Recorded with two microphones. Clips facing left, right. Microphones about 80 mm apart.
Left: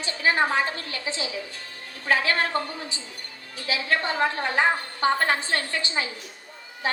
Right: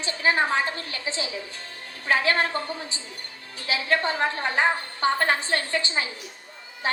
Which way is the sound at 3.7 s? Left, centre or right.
Right.